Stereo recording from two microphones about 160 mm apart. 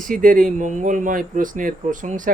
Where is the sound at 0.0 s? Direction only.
60° right (ahead or behind).